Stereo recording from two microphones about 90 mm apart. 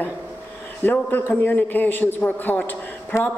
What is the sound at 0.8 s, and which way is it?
Speech, 20° left (ahead or behind).